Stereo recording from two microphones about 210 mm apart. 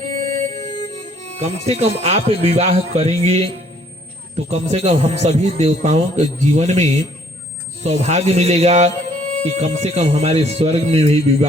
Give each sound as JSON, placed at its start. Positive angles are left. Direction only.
{"t": 0.1, "sound": "music", "side_deg": -35}
{"t": 1.6, "sound": "speech", "side_deg": -30}